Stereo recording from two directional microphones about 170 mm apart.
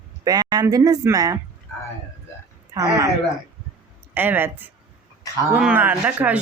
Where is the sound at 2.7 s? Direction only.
20° right (ahead or behind).